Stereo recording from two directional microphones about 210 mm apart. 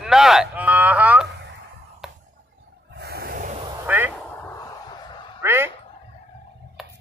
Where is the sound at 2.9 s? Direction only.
50° right (ahead or behind).